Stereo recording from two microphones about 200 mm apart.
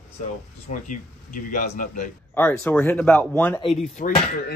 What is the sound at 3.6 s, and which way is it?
Speech, 35° left (ahead or behind).